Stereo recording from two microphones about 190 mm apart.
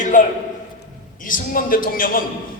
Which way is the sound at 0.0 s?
40° left (ahead or behind).